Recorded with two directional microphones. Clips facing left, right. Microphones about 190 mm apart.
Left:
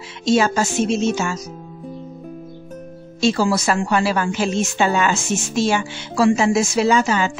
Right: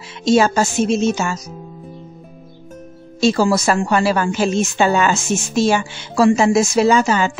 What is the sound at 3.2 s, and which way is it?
Speech, 45° right (ahead or behind).